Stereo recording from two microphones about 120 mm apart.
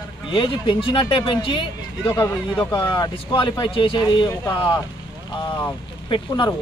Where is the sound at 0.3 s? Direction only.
45° left (ahead or behind).